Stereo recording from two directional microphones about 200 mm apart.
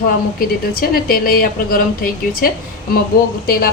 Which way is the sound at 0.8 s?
45° left (ahead or behind).